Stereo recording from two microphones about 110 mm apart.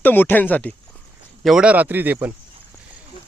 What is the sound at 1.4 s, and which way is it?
Speech, 5° right (ahead or behind).